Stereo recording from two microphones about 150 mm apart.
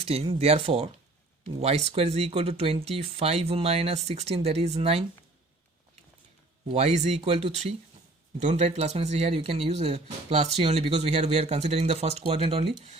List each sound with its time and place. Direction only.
0.0 s speech: 40° right (ahead or behind)
6.7 s speech: 45° right (ahead or behind)